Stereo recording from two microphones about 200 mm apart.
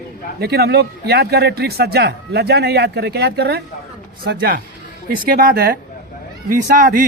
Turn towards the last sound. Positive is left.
turn(degrees=-40)  # may be behind; listen again after turning